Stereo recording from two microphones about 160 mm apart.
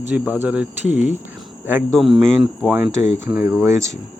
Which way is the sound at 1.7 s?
15° right (ahead or behind).